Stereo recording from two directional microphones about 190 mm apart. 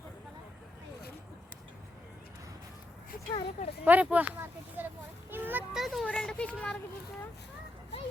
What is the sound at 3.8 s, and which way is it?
Speech, 10° right (ahead or behind).